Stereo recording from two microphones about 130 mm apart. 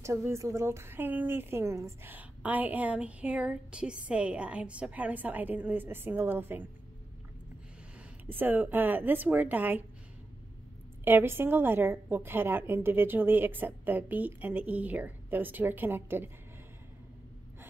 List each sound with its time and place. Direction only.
0.0 s a woman's voice: 20° right (ahead or behind)
8.3 s a woman's voice: 15° right (ahead or behind)
11.1 s a woman's voice: 15° right (ahead or behind)